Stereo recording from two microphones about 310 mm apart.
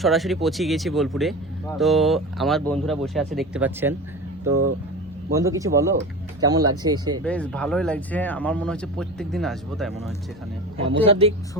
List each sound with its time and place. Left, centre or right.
0.0 s a man's voice: centre
7.3 s speech: centre
11.1 s a man's voice: centre